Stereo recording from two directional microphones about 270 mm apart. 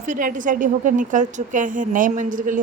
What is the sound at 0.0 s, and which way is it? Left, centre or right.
A woman's voice, right.